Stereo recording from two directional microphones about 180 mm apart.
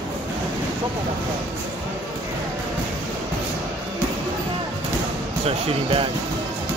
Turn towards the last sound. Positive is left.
turn(degrees=-30)  # may be behind; listen again after turning